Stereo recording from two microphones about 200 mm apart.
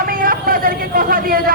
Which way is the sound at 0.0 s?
45° right (ahead or behind).